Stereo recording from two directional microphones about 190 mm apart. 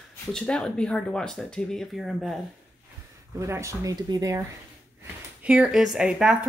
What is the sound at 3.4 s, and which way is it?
Speech, 15° right (ahead or behind).